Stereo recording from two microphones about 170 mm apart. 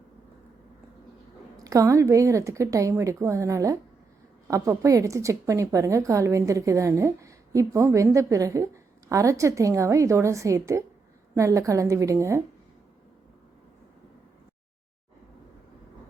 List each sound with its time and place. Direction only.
1.5 s a woman's voice: 20° right (ahead or behind)